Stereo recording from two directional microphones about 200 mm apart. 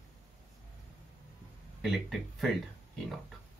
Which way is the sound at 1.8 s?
Centre (ahead or behind).